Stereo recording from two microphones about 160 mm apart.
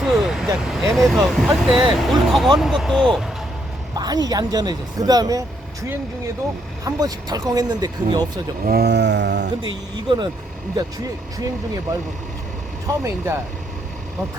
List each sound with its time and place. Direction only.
0.0 s speech: centre (ahead or behind)
3.9 s speech: 25° right (ahead or behind)
6.8 s speech: 25° right (ahead or behind)
8.6 s a sound: 80° right
9.9 s speech: 30° right (ahead or behind)